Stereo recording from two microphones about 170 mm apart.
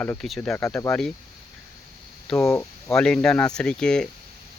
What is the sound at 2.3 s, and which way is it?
Speech, 20° left (ahead or behind).